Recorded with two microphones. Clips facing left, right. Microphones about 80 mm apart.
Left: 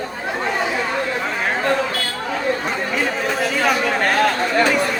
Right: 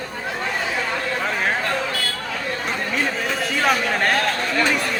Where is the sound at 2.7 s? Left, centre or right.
Centre.